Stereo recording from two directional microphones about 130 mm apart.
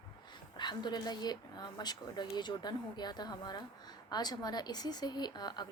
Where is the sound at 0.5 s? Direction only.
35° left (ahead or behind).